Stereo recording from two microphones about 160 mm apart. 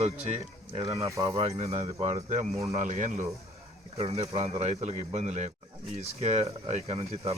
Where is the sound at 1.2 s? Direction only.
35° right (ahead or behind).